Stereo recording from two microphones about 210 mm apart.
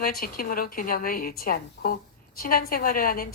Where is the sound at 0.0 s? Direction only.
45° left (ahead or behind).